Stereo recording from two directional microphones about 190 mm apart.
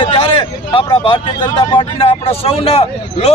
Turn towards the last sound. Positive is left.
turn(degrees=35)  # may be behind; listen again after turning